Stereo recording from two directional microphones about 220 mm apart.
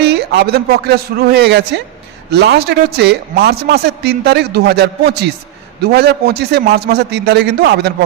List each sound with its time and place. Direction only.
0.0 s a man's voice: 45° right (ahead or behind)